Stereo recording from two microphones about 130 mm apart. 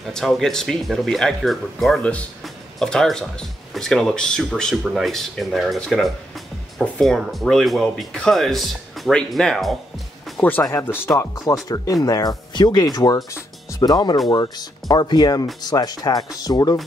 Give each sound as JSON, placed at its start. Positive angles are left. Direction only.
{"t": 0.0, "sound": "speech", "side_deg": 0}
{"t": 10.6, "sound": "speech", "side_deg": 20}